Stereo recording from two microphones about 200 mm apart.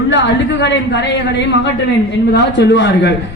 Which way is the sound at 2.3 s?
60° left (ahead or behind).